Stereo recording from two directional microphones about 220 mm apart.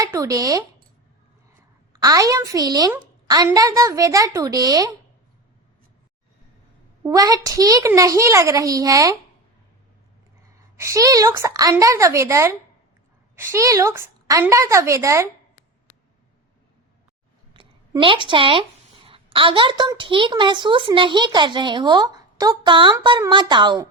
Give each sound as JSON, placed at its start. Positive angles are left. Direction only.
{"t": 0.0, "sound": "speech", "side_deg": -15}
{"t": 1.9, "sound": "a woman's voice", "side_deg": -15}
{"t": 7.0, "sound": "a woman's voice", "side_deg": -15}
{"t": 10.8, "sound": "a woman's voice", "side_deg": -15}
{"t": 17.5, "sound": "a sound", "side_deg": -20}
{"t": 19.0, "sound": "a woman's voice", "side_deg": -25}